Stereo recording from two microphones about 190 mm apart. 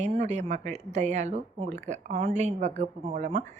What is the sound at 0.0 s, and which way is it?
Speech, 35° right (ahead or behind).